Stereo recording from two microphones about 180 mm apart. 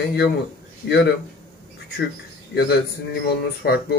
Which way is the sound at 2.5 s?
65° left (ahead or behind).